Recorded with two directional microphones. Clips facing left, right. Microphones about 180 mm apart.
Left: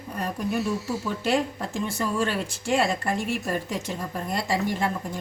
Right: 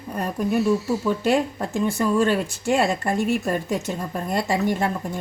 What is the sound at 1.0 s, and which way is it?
Speech, 45° right (ahead or behind).